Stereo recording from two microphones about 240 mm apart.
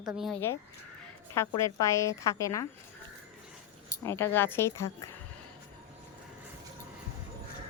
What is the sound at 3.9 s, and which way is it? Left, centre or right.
A woman's voice, centre.